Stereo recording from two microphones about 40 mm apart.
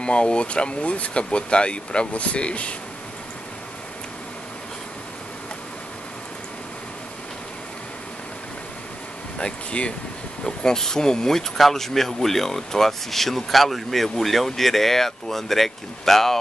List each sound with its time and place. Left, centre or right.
0.0 s speech: left
9.4 s speech: left
10.4 s speech: centre